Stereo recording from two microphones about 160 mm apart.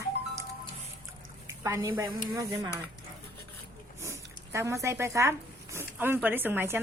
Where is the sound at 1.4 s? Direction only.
20° right (ahead or behind).